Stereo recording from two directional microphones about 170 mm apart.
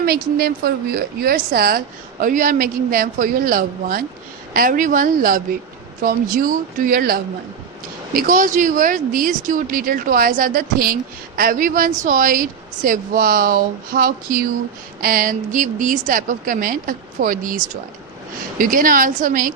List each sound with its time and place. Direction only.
0.0 s speech: 65° right (ahead or behind)
2.2 s a woman's voice: 50° right (ahead or behind)
18.6 s speech: 55° right (ahead or behind)